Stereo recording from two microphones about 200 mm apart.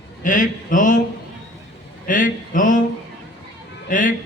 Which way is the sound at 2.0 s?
40° left (ahead or behind).